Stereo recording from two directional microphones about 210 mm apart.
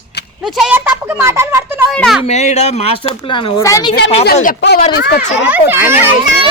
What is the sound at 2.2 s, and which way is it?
Speech, 35° left (ahead or behind).